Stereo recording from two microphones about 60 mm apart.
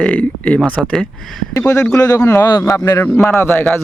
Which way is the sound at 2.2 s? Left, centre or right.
Left.